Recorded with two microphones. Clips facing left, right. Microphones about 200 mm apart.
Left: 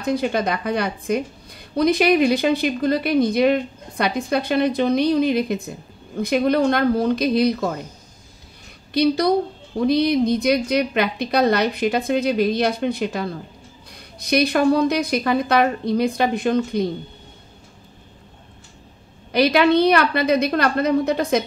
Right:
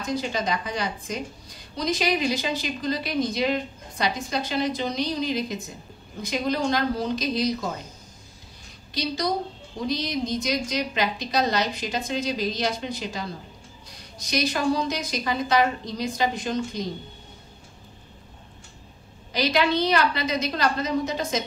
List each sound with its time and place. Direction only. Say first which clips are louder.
0.0 s a woman's voice: left 6 dB; 60° left (ahead or behind)
8.9 s a woman's voice: left 9 dB; 60° left (ahead or behind)
19.3 s a woman's voice: left 7 dB; 60° left (ahead or behind)